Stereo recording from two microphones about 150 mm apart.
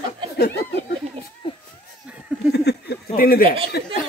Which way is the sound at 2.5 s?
90° left.